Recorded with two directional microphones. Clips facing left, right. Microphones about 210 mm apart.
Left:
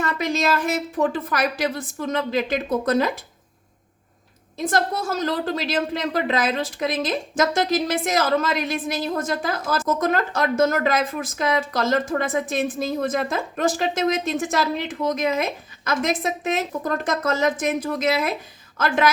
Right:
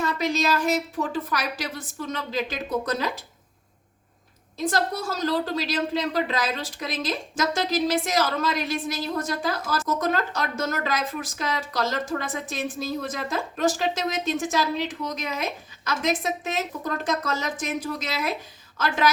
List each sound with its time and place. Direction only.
0.0 s a woman's voice: 55° left (ahead or behind)
4.5 s a woman's voice: 50° left (ahead or behind)